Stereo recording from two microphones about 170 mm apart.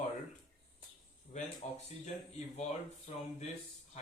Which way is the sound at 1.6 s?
40° left (ahead or behind).